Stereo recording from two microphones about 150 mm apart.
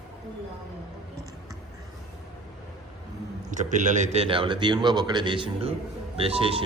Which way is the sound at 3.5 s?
55° right (ahead or behind).